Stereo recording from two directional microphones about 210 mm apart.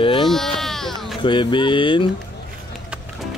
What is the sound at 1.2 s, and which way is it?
Speech, 25° left (ahead or behind).